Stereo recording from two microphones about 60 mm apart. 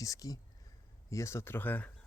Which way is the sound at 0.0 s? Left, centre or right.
Left.